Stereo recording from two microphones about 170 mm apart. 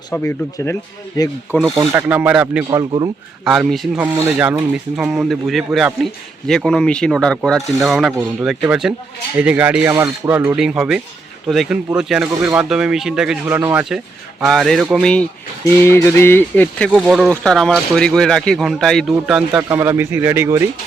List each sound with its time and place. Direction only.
0.1 s speech: 15° left (ahead or behind)
1.9 s speech: 10° right (ahead or behind)
2.6 s speech: 25° right (ahead or behind)
3.4 s speech: 5° right (ahead or behind)
14.4 s speech: centre (ahead or behind)
15.8 s speech: 15° left (ahead or behind)
16.9 s speech: 5° right (ahead or behind)
19.5 s speech: 10° right (ahead or behind)